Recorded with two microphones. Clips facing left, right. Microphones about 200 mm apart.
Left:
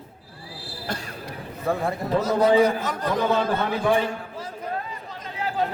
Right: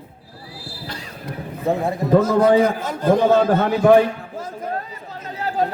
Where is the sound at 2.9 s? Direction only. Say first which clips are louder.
Right 8 dB; 25° right (ahead or behind).